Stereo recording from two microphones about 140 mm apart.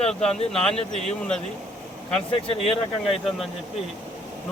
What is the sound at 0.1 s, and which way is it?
Speech, 5° left (ahead or behind).